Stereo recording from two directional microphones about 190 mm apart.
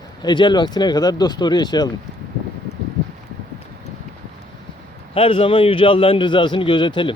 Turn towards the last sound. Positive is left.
turn(degrees=25)  # may be behind; listen again after turning